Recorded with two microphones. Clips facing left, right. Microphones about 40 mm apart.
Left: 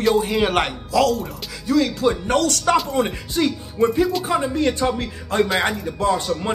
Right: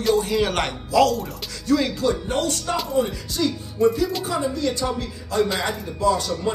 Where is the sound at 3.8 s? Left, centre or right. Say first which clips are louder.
Even; centre.